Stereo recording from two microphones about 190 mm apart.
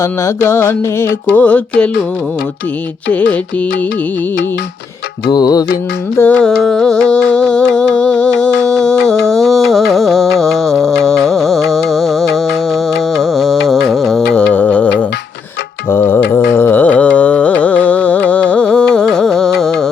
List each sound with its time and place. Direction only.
0.0 s music: 15° left (ahead or behind)
3.1 s music: 10° left (ahead or behind)
5.3 s music: 20° left (ahead or behind)
6.1 s music: 5° left (ahead or behind)
14.3 s a sound: 5° left (ahead or behind)
15.9 s mantra: 10° left (ahead or behind)
16.3 s carnatic music: 10° left (ahead or behind)